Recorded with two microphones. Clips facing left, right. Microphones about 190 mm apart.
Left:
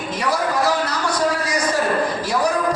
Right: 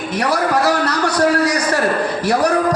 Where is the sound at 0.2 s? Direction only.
70° right (ahead or behind).